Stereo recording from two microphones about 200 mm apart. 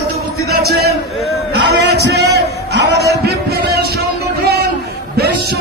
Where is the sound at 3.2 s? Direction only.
55° right (ahead or behind).